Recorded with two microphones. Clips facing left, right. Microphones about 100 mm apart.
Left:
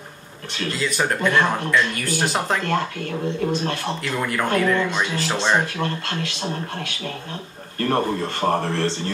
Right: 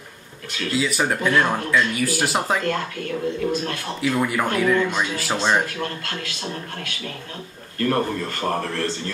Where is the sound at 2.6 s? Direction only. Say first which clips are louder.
Left 1 dB; 40° left (ahead or behind).